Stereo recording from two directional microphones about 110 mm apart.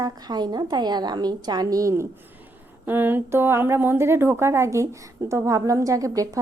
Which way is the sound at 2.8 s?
20° right (ahead or behind).